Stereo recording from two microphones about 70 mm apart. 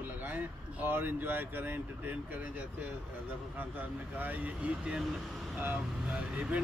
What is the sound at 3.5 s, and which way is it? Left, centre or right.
A man's voice, right.